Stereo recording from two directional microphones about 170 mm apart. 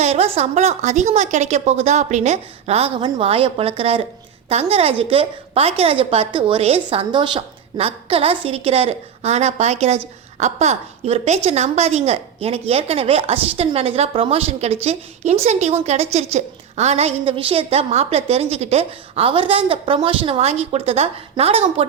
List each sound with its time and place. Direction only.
0.0 s a woman's voice: 40° right (ahead or behind)